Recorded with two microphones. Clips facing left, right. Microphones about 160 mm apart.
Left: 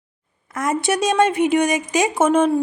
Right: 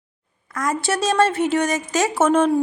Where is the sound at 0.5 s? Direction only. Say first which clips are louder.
Left 2 dB; 25° left (ahead or behind).